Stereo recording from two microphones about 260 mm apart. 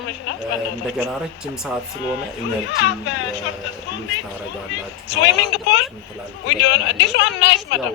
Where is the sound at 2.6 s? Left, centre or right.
Left.